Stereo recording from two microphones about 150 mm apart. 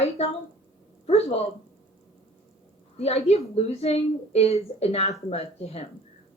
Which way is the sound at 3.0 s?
45° left (ahead or behind).